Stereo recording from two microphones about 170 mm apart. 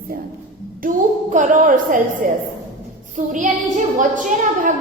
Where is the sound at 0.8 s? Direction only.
50° right (ahead or behind).